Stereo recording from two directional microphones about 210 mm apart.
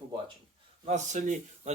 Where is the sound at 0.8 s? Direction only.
35° right (ahead or behind).